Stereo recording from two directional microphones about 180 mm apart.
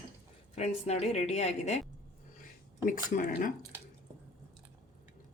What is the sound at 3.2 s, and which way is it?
Speech, 50° left (ahead or behind).